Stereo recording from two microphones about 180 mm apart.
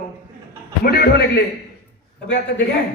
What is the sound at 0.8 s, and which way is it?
Speech, 55° left (ahead or behind).